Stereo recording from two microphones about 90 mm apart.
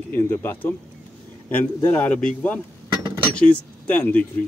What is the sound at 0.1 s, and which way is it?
A man's voice, 25° left (ahead or behind).